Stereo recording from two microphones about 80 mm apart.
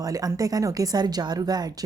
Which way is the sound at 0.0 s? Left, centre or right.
Right.